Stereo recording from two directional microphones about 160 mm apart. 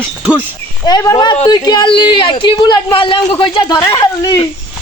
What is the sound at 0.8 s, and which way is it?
Speech, 20° left (ahead or behind).